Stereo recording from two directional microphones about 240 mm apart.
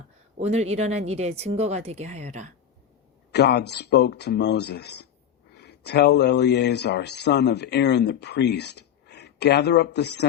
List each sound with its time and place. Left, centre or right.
0.3 s speech: right
3.3 s speech: left